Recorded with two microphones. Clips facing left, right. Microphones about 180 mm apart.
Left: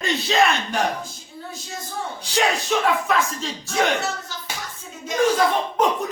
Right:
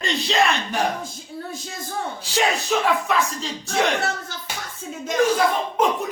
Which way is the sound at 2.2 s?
Centre (ahead or behind).